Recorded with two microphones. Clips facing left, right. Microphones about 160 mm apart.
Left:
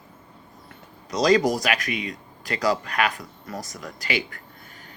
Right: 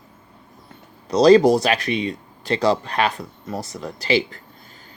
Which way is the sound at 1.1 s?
30° right (ahead or behind).